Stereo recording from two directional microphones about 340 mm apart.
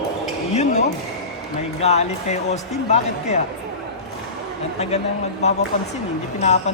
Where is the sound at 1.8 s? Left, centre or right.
Centre.